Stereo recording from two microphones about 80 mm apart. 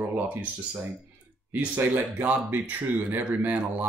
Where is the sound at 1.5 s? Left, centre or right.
Right.